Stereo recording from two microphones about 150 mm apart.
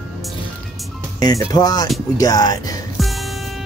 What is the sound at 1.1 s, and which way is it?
Speech, 25° left (ahead or behind).